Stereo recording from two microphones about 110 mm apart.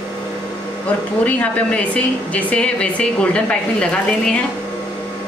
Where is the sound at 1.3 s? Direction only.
10° left (ahead or behind).